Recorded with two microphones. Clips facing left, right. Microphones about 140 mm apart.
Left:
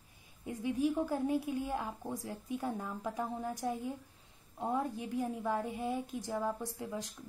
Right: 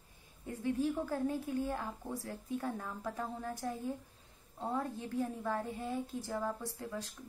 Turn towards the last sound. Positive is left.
turn(degrees=15)  # may be behind; listen again after turning